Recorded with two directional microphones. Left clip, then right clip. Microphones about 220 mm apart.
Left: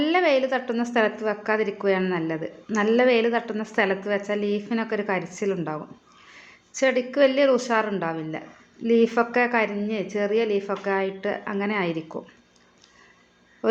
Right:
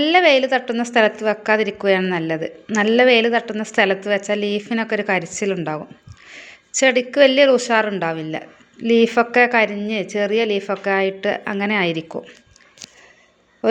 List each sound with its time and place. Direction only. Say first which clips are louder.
0.0 s a woman's voice: right 7 dB; 25° right (ahead or behind)